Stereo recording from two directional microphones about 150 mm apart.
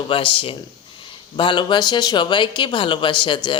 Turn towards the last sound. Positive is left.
turn(degrees=35)  # may be behind; listen again after turning